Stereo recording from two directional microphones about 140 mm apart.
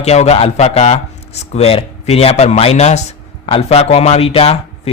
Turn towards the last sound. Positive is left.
turn(degrees=45)  # may be behind; listen again after turning